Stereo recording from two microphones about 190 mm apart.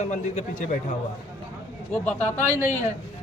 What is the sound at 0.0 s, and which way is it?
Speech, 40° left (ahead or behind).